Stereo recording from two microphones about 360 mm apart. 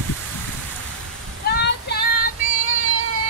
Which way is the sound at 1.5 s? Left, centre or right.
Left.